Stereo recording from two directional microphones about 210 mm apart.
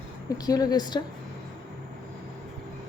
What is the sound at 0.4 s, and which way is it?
Speech, 15° left (ahead or behind).